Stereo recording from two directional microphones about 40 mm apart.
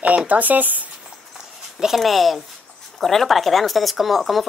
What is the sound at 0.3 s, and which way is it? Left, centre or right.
Speech, right.